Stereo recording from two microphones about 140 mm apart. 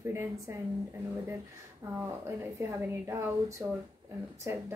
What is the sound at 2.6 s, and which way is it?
A woman's voice, 20° right (ahead or behind).